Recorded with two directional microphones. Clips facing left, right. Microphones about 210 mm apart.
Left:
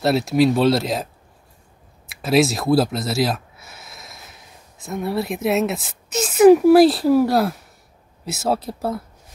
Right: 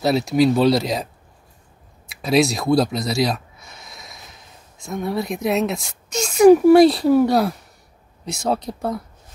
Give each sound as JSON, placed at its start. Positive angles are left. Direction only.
{"t": 0.0, "sound": "speech", "side_deg": 0}
{"t": 2.0, "sound": "speech", "side_deg": 0}